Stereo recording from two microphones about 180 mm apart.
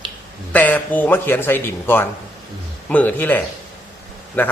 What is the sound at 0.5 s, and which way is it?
A man's voice, 10° left (ahead or behind).